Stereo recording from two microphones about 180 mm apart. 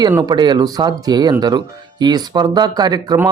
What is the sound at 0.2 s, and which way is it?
A man's voice, 25° right (ahead or behind).